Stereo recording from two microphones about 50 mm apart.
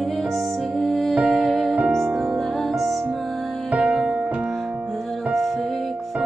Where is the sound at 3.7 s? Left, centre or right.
Right.